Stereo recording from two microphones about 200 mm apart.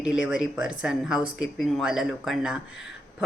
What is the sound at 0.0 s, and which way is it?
A woman's voice, 5° right (ahead or behind).